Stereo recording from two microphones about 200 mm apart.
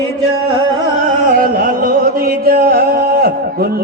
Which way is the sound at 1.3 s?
45° right (ahead or behind).